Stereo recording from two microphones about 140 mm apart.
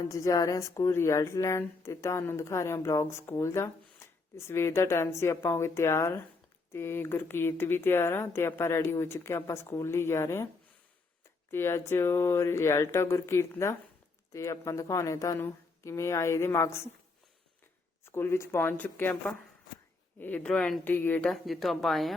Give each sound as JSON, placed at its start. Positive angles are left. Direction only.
{"t": 0.0, "sound": "speech", "side_deg": 20}
{"t": 11.5, "sound": "speech", "side_deg": 15}
{"t": 18.0, "sound": "speech", "side_deg": 15}
{"t": 21.2, "sound": "a woman's voice", "side_deg": 0}